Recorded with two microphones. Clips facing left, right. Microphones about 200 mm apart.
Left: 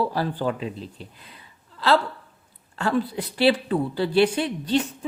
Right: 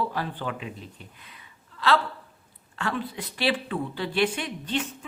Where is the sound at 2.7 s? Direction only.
40° left (ahead or behind).